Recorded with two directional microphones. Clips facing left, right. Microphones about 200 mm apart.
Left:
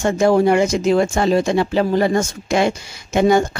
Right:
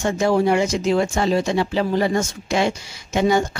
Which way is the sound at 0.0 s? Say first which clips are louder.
Left 4 dB; 50° left (ahead or behind).